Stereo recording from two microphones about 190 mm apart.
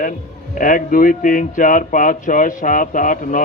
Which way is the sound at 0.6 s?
45° left (ahead or behind).